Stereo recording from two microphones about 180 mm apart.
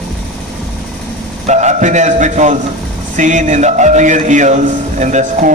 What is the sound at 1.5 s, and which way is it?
A man's voice, 40° right (ahead or behind).